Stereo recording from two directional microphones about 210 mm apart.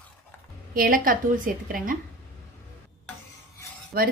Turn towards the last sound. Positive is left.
turn(degrees=-45)  # may be behind; listen again after turning